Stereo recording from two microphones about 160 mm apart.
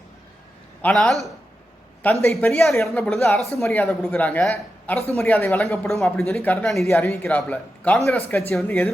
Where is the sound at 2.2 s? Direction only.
15° left (ahead or behind).